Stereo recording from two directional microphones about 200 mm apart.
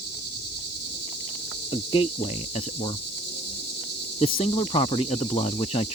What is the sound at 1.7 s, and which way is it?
Speech, 25° left (ahead or behind).